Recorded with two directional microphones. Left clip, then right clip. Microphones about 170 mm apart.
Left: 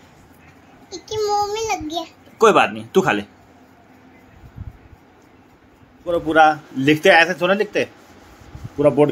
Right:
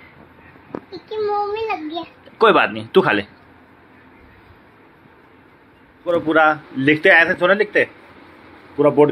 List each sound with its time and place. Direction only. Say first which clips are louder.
0.8 s child singing: left 1 dB; 40° left (ahead or behind)
2.3 s speech: even; 5° left (ahead or behind)
6.0 s speech: left 1 dB; 15° left (ahead or behind)